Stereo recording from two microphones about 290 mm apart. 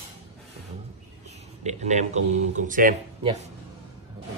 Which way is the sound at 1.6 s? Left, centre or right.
Right.